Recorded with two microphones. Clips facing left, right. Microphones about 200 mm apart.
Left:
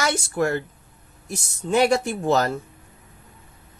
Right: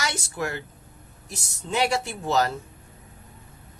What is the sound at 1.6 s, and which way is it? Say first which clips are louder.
Speech: left 6 dB; 50° left (ahead or behind).